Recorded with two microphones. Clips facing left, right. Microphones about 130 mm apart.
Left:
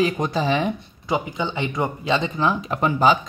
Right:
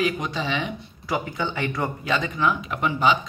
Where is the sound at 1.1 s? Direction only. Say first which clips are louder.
Left 2 dB; 20° left (ahead or behind).